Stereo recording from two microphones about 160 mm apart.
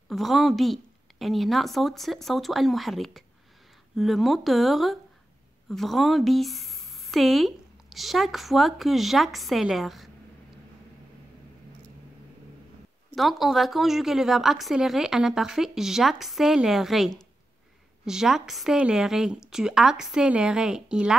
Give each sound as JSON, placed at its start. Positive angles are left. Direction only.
{"t": 0.1, "sound": "a woman's voice", "side_deg": 0}
{"t": 13.1, "sound": "a woman's voice", "side_deg": 0}